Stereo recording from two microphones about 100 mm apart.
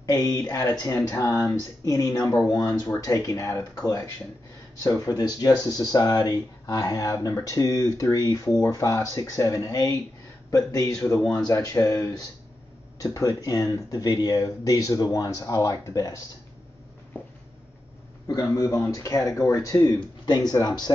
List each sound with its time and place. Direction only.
0.0 s speech: 40° left (ahead or behind)
18.2 s speech: 30° left (ahead or behind)